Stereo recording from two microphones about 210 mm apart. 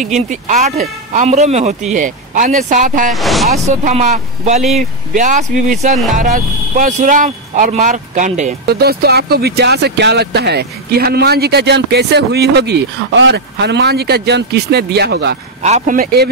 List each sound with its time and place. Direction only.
0.0 s speech: 35° right (ahead or behind)
3.1 s speech: centre (ahead or behind)
3.5 s speech: 30° right (ahead or behind); by 15.3 s 50° right (ahead or behind)
15.6 s speech: 35° right (ahead or behind)